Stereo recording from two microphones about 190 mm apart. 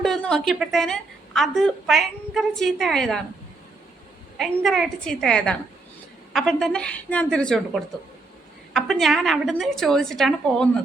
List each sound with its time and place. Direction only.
0.0 s a woman's voice: 5° left (ahead or behind)
4.4 s a woman's voice: centre (ahead or behind)